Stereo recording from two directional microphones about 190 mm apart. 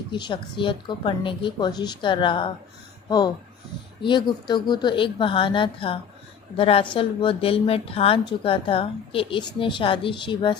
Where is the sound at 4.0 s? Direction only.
25° left (ahead or behind).